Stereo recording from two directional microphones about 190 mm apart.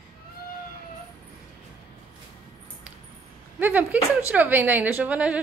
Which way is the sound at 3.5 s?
10° right (ahead or behind).